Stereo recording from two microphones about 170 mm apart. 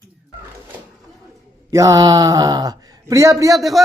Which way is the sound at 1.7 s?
20° right (ahead or behind).